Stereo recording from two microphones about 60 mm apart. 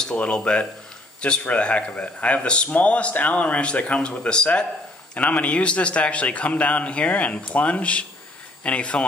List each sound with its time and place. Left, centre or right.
0.0 s a man's voice: centre